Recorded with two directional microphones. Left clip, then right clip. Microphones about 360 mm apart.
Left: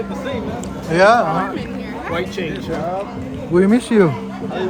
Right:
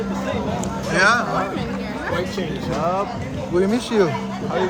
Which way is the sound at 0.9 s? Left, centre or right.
Centre.